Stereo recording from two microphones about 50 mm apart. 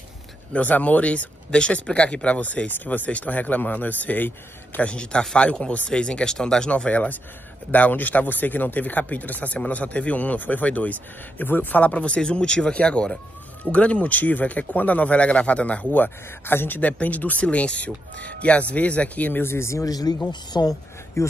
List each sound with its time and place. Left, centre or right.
0.5 s a man's voice: left
4.8 s a man's voice: left
6.9 s a man's voice: left
19.4 s speech: left
21.2 s speech: left